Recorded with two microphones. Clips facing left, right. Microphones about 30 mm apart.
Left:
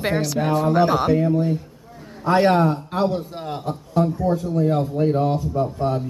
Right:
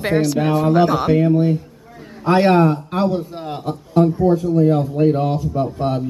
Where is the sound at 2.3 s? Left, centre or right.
Centre.